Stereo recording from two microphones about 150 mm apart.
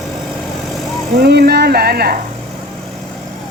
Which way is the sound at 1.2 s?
90° right.